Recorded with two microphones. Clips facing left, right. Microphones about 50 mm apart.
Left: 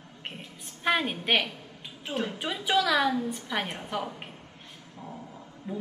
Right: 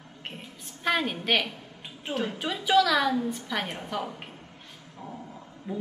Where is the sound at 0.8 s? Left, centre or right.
Centre.